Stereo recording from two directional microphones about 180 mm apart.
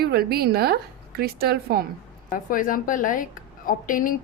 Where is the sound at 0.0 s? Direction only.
60° right (ahead or behind).